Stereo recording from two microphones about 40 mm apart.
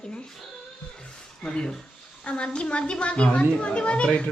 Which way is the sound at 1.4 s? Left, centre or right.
Left.